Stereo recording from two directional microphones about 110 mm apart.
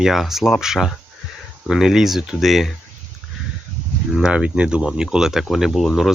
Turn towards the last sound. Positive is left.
turn(degrees=0)  # may be behind; listen again after turning